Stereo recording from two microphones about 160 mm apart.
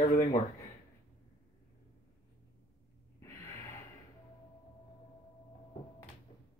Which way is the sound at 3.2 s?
15° left (ahead or behind).